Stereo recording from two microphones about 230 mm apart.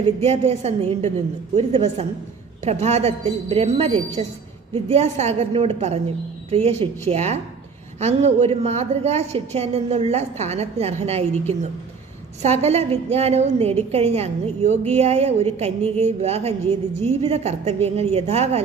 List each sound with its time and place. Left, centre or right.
0.3 s a woman's voice: right